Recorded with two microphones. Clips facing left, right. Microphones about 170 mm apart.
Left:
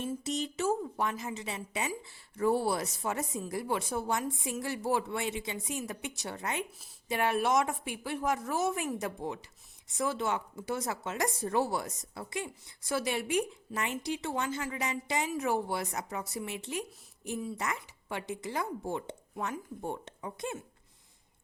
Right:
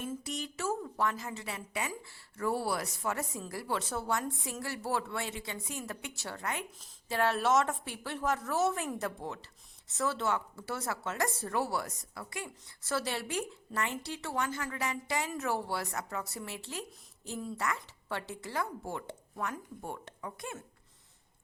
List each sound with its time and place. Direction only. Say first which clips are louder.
0.1 s a woman's voice: left 4 dB; 20° left (ahead or behind)